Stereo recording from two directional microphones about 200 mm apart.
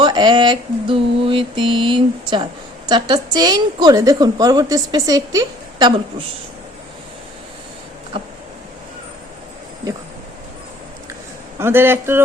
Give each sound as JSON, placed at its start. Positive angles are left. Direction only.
{"t": 0.0, "sound": "mantra", "side_deg": -20}
{"t": 8.1, "sound": "mantra", "side_deg": -25}
{"t": 11.6, "sound": "a man's voice", "side_deg": -10}